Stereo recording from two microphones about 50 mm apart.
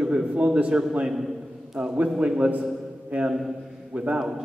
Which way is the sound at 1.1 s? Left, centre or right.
Centre.